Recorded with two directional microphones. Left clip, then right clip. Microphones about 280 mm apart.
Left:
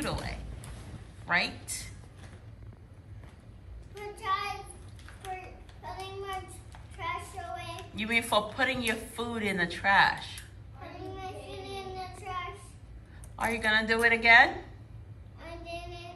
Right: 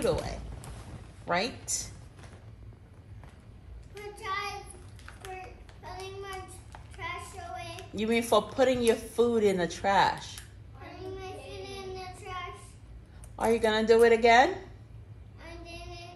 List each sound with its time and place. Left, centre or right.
1.2 s a woman's voice: centre
3.9 s child singing: centre
5.2 s a sound: centre
7.9 s speech: centre
10.8 s child singing: centre
13.4 s speech: centre
15.4 s child singing: centre